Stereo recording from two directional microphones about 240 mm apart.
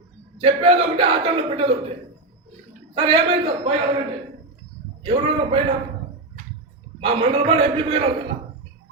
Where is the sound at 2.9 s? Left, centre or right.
Right.